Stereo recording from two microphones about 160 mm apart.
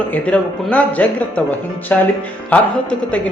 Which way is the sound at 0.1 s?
10° left (ahead or behind).